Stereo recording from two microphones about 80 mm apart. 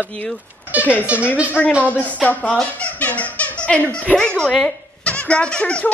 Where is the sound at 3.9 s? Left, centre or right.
Centre.